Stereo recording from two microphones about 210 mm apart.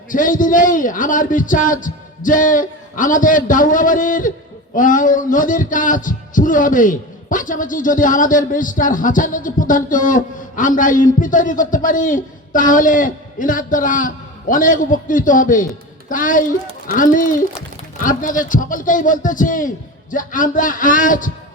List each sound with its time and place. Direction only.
0.1 s heart sounds: 40° left (ahead or behind)